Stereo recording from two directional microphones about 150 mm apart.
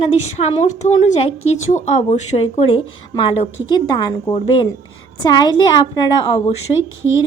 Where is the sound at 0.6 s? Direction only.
50° left (ahead or behind).